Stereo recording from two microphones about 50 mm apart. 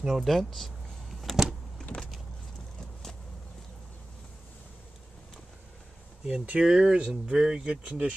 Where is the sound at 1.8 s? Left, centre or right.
Centre.